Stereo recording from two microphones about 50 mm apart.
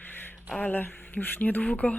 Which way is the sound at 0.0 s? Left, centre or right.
Left.